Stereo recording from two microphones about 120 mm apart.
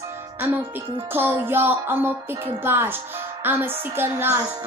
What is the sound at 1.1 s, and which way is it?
Music, 20° right (ahead or behind).